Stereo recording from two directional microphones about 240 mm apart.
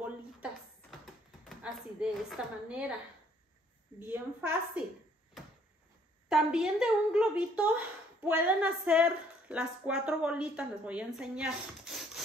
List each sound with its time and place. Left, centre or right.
1.6 s speech: centre
4.0 s a woman's voice: centre
6.2 s a woman's voice: centre